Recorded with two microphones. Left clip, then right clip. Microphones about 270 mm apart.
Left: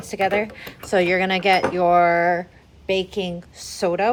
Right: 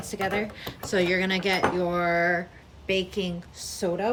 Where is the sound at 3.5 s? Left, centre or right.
Centre.